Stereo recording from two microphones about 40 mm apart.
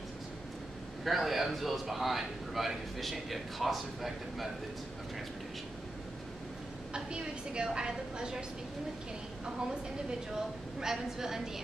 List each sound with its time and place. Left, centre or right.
1.0 s a man's voice: centre
6.9 s a woman's voice: right
10.8 s a woman's voice: centre